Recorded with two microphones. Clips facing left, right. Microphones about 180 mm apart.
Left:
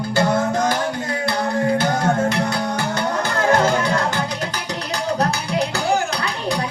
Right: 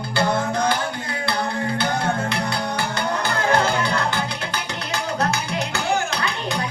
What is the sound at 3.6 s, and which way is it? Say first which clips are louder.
Music: left 4 dB; 45° left (ahead or behind).